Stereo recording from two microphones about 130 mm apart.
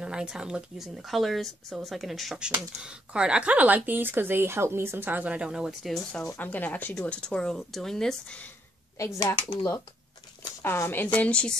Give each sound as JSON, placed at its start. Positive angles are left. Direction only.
{"t": 0.0, "sound": "speech", "side_deg": -5}
{"t": 6.3, "sound": "speech", "side_deg": 15}
{"t": 8.9, "sound": "speech", "side_deg": 25}
{"t": 10.6, "sound": "speech", "side_deg": 15}